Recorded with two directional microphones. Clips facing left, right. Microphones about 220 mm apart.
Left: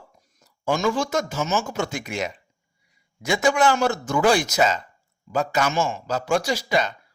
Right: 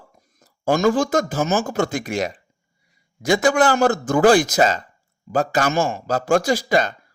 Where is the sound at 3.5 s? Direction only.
45° right (ahead or behind).